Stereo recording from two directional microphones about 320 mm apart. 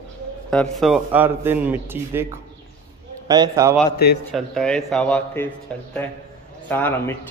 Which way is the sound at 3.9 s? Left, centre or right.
Left.